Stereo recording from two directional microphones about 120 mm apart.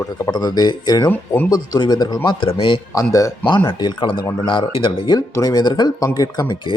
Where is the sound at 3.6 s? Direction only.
40° left (ahead or behind).